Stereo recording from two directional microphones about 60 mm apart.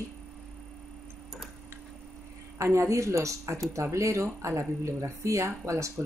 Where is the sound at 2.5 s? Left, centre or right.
Right.